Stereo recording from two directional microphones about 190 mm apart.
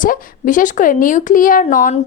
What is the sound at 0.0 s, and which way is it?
A woman's voice, 45° left (ahead or behind).